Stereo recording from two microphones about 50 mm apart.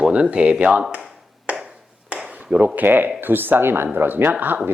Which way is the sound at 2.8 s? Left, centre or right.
Right.